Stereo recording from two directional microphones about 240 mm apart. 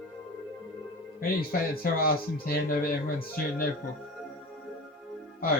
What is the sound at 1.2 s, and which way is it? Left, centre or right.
Speech, left.